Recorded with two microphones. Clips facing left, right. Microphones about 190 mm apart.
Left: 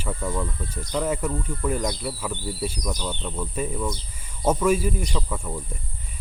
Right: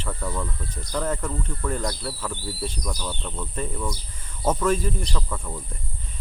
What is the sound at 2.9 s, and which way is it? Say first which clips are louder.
Speech: left 2 dB; 20° left (ahead or behind).